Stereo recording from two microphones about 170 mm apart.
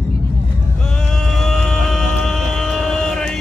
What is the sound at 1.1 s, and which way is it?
Music, centre (ahead or behind).